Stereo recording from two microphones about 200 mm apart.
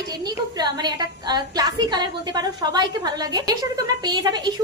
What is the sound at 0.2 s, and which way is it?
A woman's voice, 20° right (ahead or behind).